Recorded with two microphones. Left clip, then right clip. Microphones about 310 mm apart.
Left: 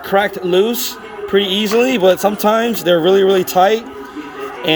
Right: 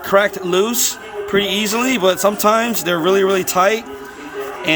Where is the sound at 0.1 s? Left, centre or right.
Centre.